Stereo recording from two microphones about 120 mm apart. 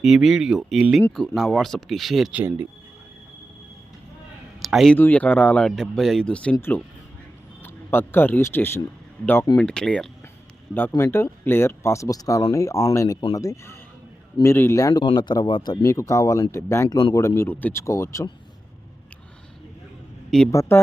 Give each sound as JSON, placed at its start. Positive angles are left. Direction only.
{"t": 0.0, "sound": "speech", "side_deg": 0}
{"t": 2.3, "sound": "speech", "side_deg": -15}
{"t": 4.6, "sound": "speech", "side_deg": 0}
{"t": 4.9, "sound": "speech", "side_deg": 15}
{"t": 9.6, "sound": "speech", "side_deg": 5}
{"t": 10.8, "sound": "speech", "side_deg": 20}
{"t": 15.0, "sound": "speech", "side_deg": 40}
{"t": 15.8, "sound": "speech", "side_deg": 25}
{"t": 20.5, "sound": "speech", "side_deg": 25}